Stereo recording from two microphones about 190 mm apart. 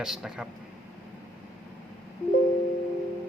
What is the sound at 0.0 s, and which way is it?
Speech, centre (ahead or behind).